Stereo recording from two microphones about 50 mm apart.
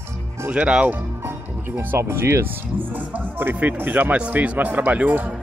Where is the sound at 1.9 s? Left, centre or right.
Right.